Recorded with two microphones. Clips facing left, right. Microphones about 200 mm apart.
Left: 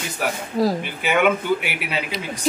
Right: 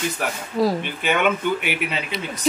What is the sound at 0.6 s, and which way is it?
Speech, 5° left (ahead or behind).